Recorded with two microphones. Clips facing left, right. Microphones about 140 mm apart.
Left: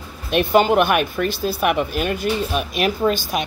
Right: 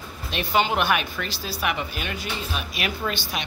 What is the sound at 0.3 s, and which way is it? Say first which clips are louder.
Speech: left 8 dB; 50° left (ahead or behind).